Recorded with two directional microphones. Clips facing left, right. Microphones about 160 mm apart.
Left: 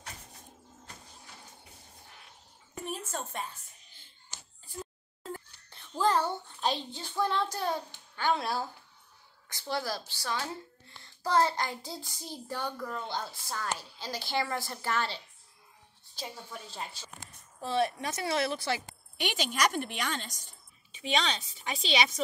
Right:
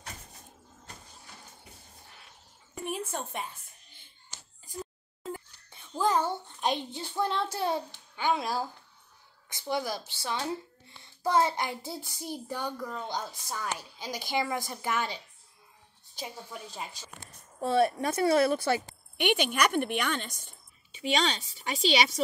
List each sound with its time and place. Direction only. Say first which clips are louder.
3.1 s a woman's voice: right 2 dB; 15° right (ahead or behind)
5.2 s whispering: right 2 dB; 10° right (ahead or behind)
6.2 s a child's voice: right 1 dB; 15° right (ahead or behind)
8.2 s a woman's voice: right 1 dB; 10° right (ahead or behind)
16.7 s a woman's voice: right 1 dB; 10° right (ahead or behind)
17.6 s a woman's voice: right 5 dB; 50° right (ahead or behind)
20.9 s speech: right 2 dB; 45° right (ahead or behind)